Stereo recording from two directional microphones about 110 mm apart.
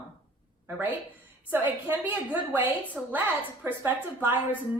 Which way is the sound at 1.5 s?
20° right (ahead or behind).